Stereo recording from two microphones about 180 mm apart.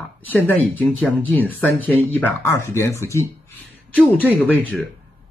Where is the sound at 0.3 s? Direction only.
10° left (ahead or behind).